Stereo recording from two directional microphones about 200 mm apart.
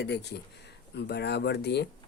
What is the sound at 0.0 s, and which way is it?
Speech, 55° left (ahead or behind).